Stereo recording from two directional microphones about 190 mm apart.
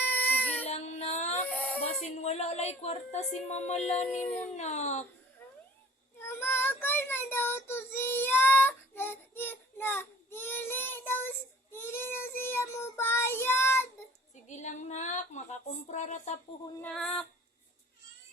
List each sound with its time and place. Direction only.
0.1 s baby cry: 10° left (ahead or behind)
0.6 s music: 35° left (ahead or behind)
1.5 s baby cry: 10° left (ahead or behind)
1.9 s music: 35° left (ahead or behind)
3.5 s speech: 35° left (ahead or behind)
4.2 s a sound: 10° left (ahead or behind)
4.5 s speech: 35° left (ahead or behind)
6.1 s child singing: 10° left (ahead or behind)
14.4 s speech: 40° left (ahead or behind)
16.8 s female singing: 5° left (ahead or behind)